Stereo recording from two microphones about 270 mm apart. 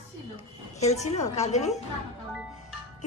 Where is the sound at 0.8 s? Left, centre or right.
Left.